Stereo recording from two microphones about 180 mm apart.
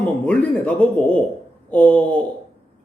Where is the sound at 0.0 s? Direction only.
5° left (ahead or behind).